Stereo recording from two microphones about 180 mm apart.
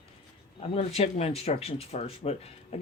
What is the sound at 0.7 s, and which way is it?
Speech, 35° left (ahead or behind).